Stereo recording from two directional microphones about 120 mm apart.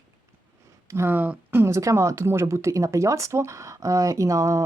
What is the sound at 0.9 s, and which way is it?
Speech, 20° right (ahead or behind).